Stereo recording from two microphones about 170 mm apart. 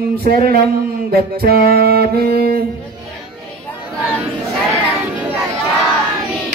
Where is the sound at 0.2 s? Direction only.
60° right (ahead or behind).